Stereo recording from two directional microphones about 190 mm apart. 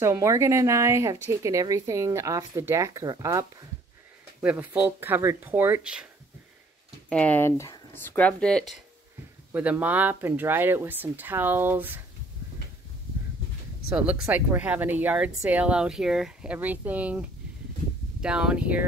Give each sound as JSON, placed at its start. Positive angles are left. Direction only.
{"t": 0.0, "sound": "speech", "side_deg": -15}
{"t": 7.1, "sound": "speech", "side_deg": 5}
{"t": 9.5, "sound": "speech", "side_deg": -10}
{"t": 13.9, "sound": "speech", "side_deg": -5}